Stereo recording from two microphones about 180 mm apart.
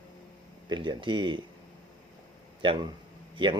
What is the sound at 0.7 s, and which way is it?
Speech, 25° right (ahead or behind).